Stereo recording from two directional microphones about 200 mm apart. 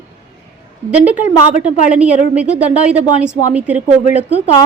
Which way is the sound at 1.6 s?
5° right (ahead or behind).